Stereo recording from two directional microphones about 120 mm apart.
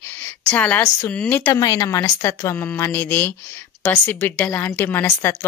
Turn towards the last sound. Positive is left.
turn(degrees=15)  # may be behind; listen again after turning